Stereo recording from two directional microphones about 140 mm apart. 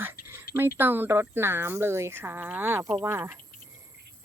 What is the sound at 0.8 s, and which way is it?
Speech, 15° right (ahead or behind).